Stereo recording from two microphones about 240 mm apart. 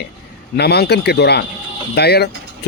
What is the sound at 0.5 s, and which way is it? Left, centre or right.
A man's voice, left.